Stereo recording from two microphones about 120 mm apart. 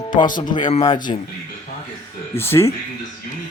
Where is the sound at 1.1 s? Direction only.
55° left (ahead or behind).